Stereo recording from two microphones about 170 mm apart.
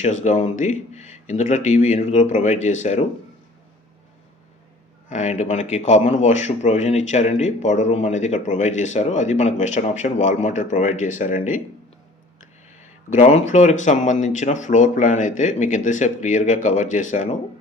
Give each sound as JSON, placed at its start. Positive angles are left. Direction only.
{"t": 0.0, "sound": "a man's voice", "side_deg": 45}
{"t": 5.0, "sound": "a man's voice", "side_deg": 45}
{"t": 12.4, "sound": "a sound", "side_deg": 45}
{"t": 13.5, "sound": "a man's voice", "side_deg": 45}